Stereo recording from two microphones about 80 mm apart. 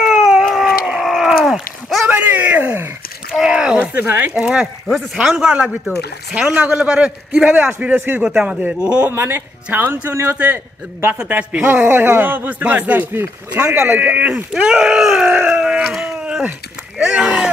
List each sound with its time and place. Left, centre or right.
0.0 s dog: centre
1.0 s a sound: centre
2.0 s a sound: centre
3.8 s speech: right
4.8 s a man's voice: centre
9.1 s a man's voice: right
9.7 s a man's voice: right
10.3 s a man's voice: centre
17.0 s a sound: centre